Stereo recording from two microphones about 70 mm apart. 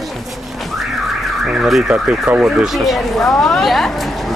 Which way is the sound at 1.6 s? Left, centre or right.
Centre.